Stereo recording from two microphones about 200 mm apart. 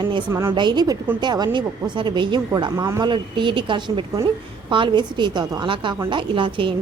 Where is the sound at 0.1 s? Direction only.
20° right (ahead or behind).